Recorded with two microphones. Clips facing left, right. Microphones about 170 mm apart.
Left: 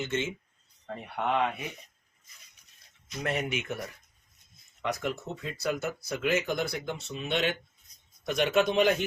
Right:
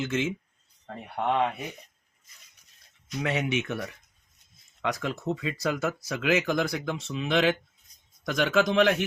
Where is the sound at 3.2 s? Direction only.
85° right.